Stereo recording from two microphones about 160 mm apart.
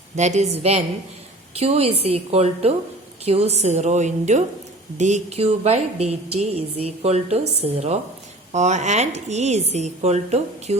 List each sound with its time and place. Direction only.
0.2 s a woman's voice: 45° right (ahead or behind)